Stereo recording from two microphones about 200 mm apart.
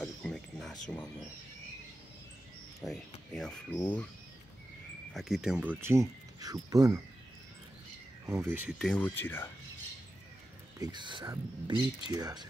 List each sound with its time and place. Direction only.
0.0 s cricket: 5° left (ahead or behind)
2.8 s speech: centre (ahead or behind)
5.1 s speech: centre (ahead or behind); by 7.0 s 15° right (ahead or behind)
8.3 s speech: 10° right (ahead or behind)
8.7 s speech: 5° left (ahead or behind)
10.8 s speech: 20° right (ahead or behind)